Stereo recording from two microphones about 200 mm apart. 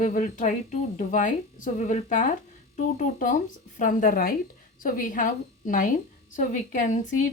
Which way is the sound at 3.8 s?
40° left (ahead or behind).